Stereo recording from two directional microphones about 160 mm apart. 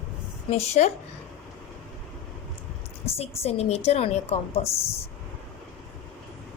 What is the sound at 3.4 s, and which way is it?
A woman's voice, 40° left (ahead or behind).